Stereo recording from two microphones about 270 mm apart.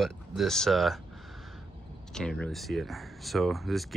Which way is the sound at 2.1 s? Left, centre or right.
Centre.